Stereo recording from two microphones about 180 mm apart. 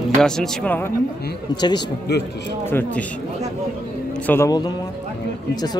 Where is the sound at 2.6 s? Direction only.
10° left (ahead or behind).